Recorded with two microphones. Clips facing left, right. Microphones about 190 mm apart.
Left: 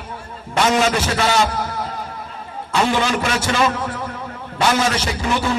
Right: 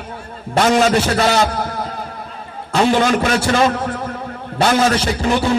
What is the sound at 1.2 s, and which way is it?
Speech, 35° right (ahead or behind).